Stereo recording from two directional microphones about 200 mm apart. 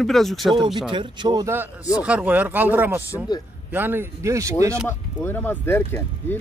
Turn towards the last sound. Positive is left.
turn(degrees=10)  # may be behind; listen again after turning